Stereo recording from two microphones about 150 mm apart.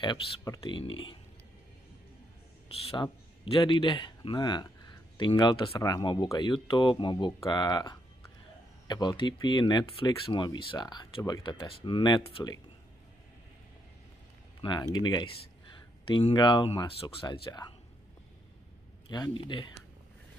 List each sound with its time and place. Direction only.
0.0 s speech: 25° left (ahead or behind)
2.7 s speech: 40° left (ahead or behind)
14.6 s speech: 30° left (ahead or behind)
19.0 s speech: 30° left (ahead or behind)